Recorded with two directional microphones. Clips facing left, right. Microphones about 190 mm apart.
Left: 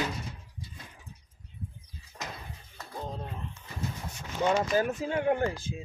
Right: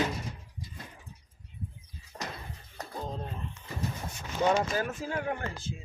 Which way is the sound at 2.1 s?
40° right (ahead or behind).